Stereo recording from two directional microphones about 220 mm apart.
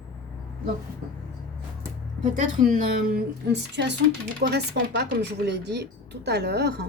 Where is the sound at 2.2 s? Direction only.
35° right (ahead or behind).